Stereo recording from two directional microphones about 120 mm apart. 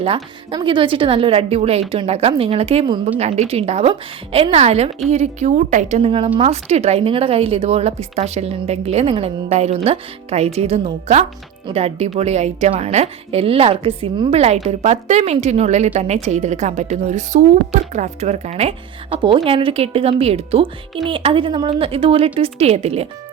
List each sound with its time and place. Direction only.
0.5 s a woman's voice: 45° right (ahead or behind); by 6.0 s 90° right
6.0 s a woman's voice: 50° right (ahead or behind)
6.4 s a woman's voice: 65° right (ahead or behind)
19.5 s a woman's voice: 50° right (ahead or behind)
21.7 s a woman's voice: 50° right (ahead or behind)